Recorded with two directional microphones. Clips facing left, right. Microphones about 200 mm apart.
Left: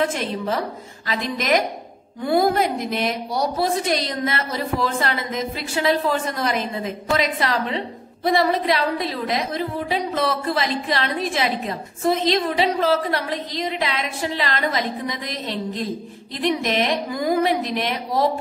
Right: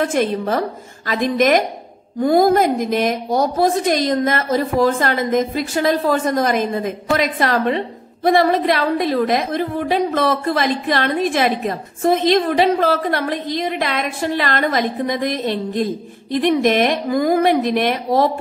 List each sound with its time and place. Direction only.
0.1 s a woman's voice: 50° right (ahead or behind)